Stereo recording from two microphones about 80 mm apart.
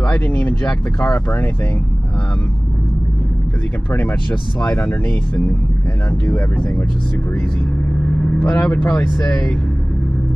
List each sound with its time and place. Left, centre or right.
0.0 s speech: left
3.9 s speech: left
8.2 s speech: centre